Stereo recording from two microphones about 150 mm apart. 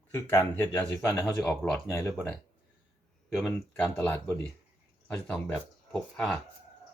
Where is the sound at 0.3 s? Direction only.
20° left (ahead or behind).